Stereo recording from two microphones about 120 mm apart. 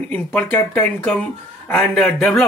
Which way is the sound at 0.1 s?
15° left (ahead or behind).